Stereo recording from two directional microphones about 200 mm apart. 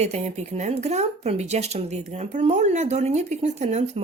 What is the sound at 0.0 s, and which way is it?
Speech, 30° right (ahead or behind).